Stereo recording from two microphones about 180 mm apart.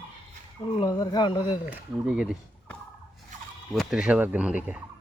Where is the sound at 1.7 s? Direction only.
5° right (ahead or behind).